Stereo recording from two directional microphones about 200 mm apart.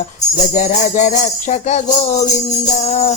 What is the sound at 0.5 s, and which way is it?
Music, 35° left (ahead or behind).